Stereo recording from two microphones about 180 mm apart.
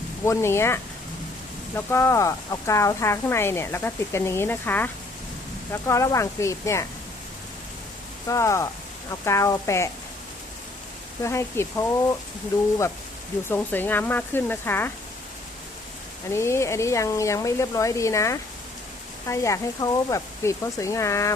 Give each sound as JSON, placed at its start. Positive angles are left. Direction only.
{"t": 0.3, "sound": "speech", "side_deg": 15}
{"t": 8.3, "sound": "speech", "side_deg": 15}
{"t": 11.2, "sound": "speech", "side_deg": 15}
{"t": 13.5, "sound": "speech", "side_deg": 10}
{"t": 16.3, "sound": "speech", "side_deg": 15}